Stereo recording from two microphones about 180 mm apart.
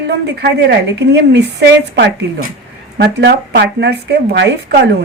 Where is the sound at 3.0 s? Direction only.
70° right (ahead or behind).